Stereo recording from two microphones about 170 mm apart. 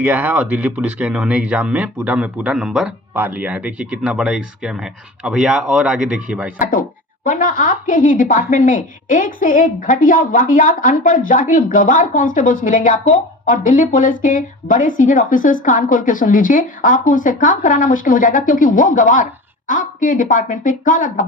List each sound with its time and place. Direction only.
0.0 s speech: 10° right (ahead or behind)
6.6 s a woman's voice: 55° left (ahead or behind)